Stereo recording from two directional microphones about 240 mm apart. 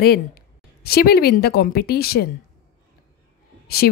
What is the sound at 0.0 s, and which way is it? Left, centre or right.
A woman's voice, left.